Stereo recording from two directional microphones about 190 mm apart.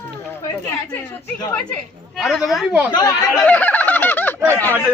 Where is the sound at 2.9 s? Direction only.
20° left (ahead or behind).